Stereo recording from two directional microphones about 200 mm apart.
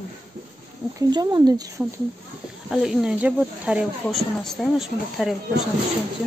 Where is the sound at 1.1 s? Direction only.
20° right (ahead or behind).